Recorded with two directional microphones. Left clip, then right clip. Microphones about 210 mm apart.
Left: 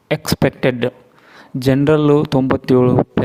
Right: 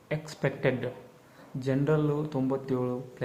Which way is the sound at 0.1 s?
50° left (ahead or behind).